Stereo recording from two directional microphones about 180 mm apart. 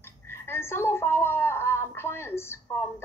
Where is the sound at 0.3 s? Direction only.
15° left (ahead or behind).